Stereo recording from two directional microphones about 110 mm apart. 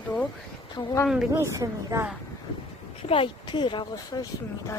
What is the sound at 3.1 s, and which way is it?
Speech, 50° left (ahead or behind).